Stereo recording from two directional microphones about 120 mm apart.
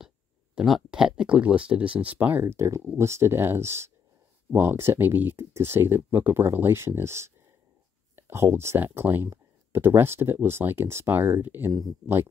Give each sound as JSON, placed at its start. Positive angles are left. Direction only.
{"t": 0.6, "sound": "speech", "side_deg": -5}